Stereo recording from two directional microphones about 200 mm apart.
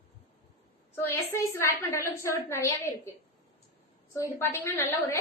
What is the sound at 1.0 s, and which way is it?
A woman's voice, 10° left (ahead or behind).